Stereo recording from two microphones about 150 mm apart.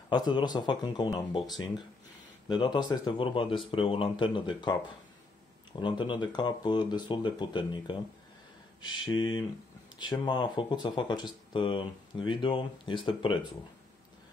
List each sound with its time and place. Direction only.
0.1 s speech: 30° left (ahead or behind)
2.4 s speech: 30° left (ahead or behind)